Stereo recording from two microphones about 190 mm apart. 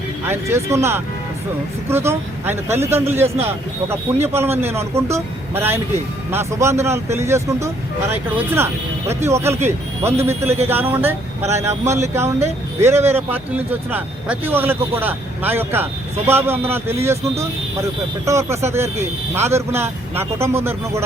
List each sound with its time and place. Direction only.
0.3 s a man's voice: 15° right (ahead or behind)
3.2 s speech: 35° right (ahead or behind)
3.8 s a man's voice: 15° right (ahead or behind)